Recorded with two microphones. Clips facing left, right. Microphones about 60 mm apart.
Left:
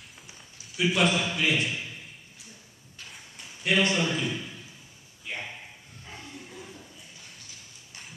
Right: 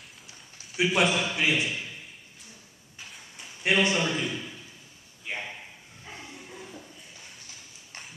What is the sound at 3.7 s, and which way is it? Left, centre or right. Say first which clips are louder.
Speech: right 1 dB; centre.